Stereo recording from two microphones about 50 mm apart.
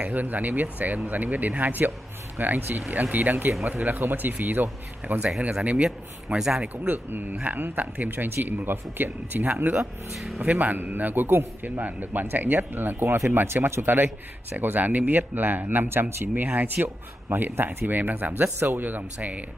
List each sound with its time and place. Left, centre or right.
0.0 s speech: right
5.4 s speech: right
6.3 s speech: centre
6.9 s speech: right
9.8 s speech: centre
10.4 s speech: right
13.8 s speech: right